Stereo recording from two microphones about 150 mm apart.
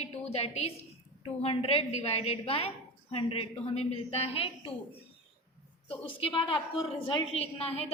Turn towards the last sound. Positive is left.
turn(degrees=40)  # may be behind; listen again after turning